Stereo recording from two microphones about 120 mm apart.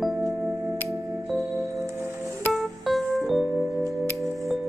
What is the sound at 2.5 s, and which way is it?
Keyboard, centre (ahead or behind).